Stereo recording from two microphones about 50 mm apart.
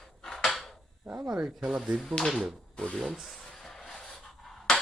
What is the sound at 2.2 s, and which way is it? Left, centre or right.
Speech, left.